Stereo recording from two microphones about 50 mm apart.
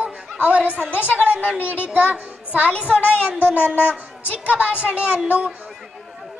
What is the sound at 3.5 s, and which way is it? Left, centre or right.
Speech, left.